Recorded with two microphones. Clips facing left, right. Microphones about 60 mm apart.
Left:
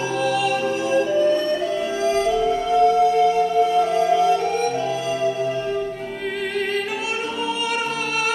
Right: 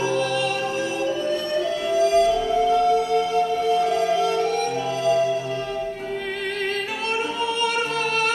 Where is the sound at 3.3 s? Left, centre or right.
Left.